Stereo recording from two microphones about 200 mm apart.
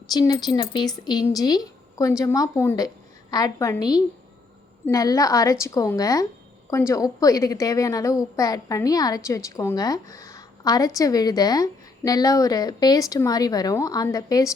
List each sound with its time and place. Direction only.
0.1 s a woman's voice: 20° left (ahead or behind)